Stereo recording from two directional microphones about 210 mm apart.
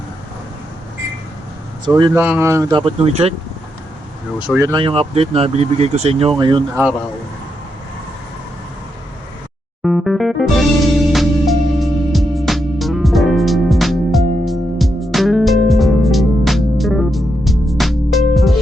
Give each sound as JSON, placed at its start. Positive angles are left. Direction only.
{"t": 2.1, "sound": "speech", "side_deg": -10}
{"t": 2.8, "sound": "speech", "side_deg": -25}
{"t": 4.4, "sound": "speech", "side_deg": -15}
{"t": 9.8, "sound": "music", "side_deg": 0}